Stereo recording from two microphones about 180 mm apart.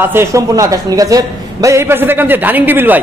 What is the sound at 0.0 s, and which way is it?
A man's voice, 15° right (ahead or behind).